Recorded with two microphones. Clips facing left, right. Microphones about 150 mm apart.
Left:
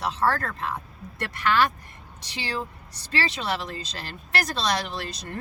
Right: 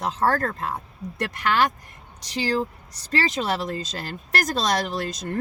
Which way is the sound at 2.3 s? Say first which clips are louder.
Right 7 dB; 40° right (ahead or behind).